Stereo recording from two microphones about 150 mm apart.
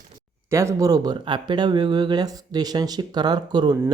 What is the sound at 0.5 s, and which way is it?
Speech, 20° right (ahead or behind).